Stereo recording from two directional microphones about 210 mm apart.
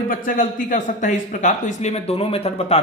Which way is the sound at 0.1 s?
40° left (ahead or behind).